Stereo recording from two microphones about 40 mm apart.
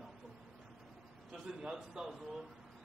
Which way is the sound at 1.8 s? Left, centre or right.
Centre.